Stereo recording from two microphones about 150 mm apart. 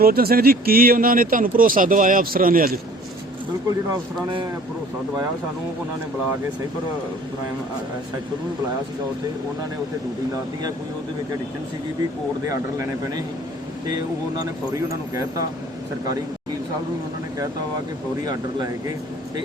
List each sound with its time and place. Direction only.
0.0 s speech: 90° right; by 2.7 s 70° right (ahead or behind)